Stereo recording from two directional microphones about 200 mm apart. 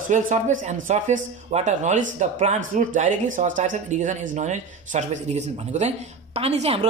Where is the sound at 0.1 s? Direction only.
35° right (ahead or behind).